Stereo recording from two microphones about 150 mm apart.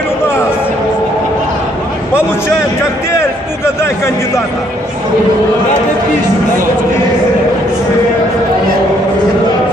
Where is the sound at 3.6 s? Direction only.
20° left (ahead or behind).